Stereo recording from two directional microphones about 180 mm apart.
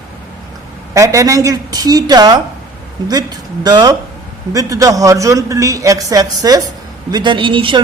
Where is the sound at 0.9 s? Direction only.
15° right (ahead or behind).